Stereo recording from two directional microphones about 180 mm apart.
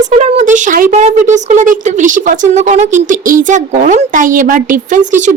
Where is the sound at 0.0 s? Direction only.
40° right (ahead or behind).